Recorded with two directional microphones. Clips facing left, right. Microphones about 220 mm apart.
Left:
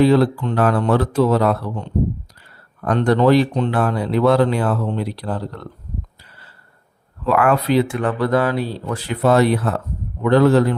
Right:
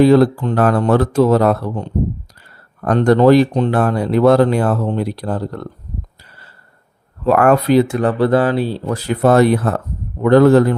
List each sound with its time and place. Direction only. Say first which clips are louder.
0.0 s speech: right 4 dB; 45° right (ahead or behind)
7.3 s speech: right 4 dB; 45° right (ahead or behind)